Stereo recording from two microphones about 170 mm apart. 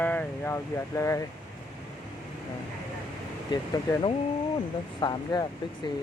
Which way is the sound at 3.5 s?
25° left (ahead or behind).